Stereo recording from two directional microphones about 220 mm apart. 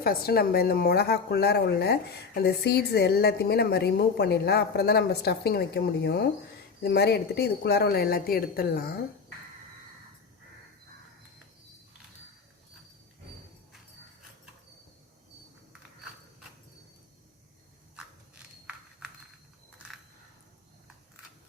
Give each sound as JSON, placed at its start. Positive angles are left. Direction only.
{"t": 0.0, "sound": "a woman's voice", "side_deg": 45}